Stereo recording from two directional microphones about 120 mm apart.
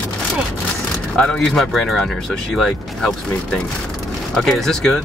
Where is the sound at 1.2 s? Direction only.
5° left (ahead or behind).